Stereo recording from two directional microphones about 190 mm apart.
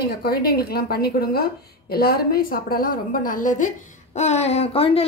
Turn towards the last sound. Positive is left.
turn(degrees=30)  # may be behind; listen again after turning